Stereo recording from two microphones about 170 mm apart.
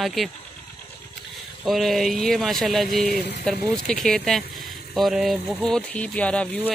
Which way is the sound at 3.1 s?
75° left (ahead or behind).